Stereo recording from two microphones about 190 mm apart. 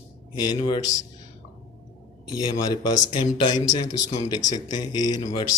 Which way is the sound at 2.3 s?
20° left (ahead or behind).